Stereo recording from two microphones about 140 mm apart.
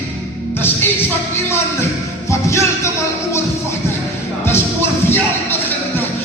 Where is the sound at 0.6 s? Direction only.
15° left (ahead or behind).